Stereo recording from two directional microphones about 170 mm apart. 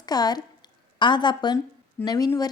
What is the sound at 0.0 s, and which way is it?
A woman's voice, 25° left (ahead or behind).